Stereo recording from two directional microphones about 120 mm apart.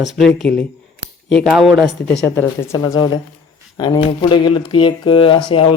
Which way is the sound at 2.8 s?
35° left (ahead or behind).